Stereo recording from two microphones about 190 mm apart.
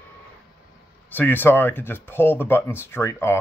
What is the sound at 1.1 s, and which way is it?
Speech, 10° left (ahead or behind).